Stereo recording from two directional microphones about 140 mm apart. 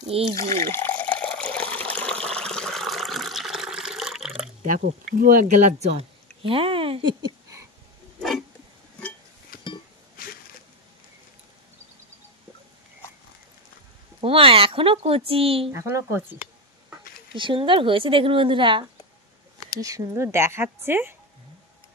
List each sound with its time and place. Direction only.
0.3 s water: 20° left (ahead or behind); by 4.5 s centre (ahead or behind)
4.6 s speech: 80° right; by 7.6 s 25° right (ahead or behind)
14.2 s speech: 40° right (ahead or behind)
15.7 s a woman's voice: 15° right (ahead or behind)
17.3 s speech: 35° right (ahead or behind)
19.8 s a woman's voice: 25° right (ahead or behind)